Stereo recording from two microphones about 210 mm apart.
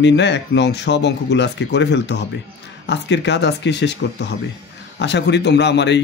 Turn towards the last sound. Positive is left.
turn(degrees=55)  # may be behind; listen again after turning